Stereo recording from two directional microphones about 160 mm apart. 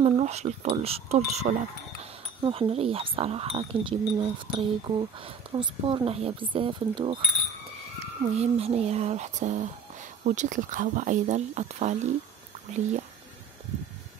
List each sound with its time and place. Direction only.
0.0 s speech: 40° right (ahead or behind)